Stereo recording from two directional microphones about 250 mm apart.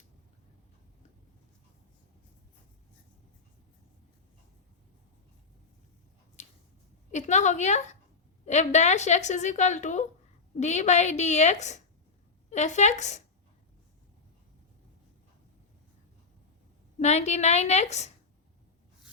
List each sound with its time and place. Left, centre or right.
6.4 s a sound: left
7.1 s a woman's voice: left
17.0 s a woman's voice: left